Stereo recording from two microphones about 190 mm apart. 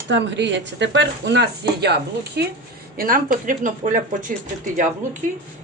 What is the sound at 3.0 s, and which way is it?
A woman's voice, 45° right (ahead or behind).